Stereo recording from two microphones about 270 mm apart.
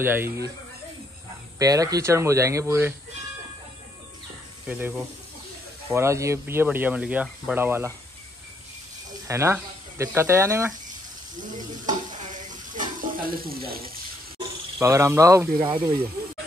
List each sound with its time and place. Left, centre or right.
0.0 s speech: centre
1.6 s speech: centre
4.6 s speech: centre
9.3 s speech: centre
11.5 s stir: right
14.8 s speech: centre